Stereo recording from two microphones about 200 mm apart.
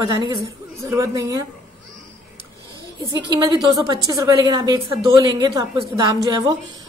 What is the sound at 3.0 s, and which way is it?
A woman's voice, 20° right (ahead or behind).